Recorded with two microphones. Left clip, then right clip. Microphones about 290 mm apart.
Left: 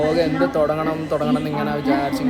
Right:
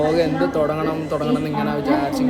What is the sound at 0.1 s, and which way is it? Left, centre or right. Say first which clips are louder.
Speech: even; centre.